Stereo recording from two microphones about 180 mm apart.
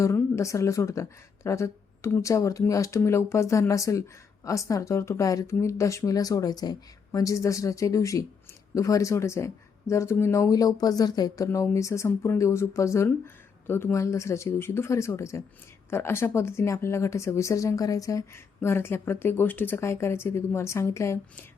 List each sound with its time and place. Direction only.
0.0 s speech: 15° left (ahead or behind)